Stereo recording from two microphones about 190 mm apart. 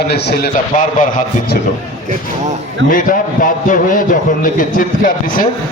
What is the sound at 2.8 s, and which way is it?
A man's voice, 45° left (ahead or behind).